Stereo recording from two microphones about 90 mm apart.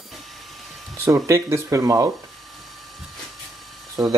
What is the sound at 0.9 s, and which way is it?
Speech, 30° right (ahead or behind).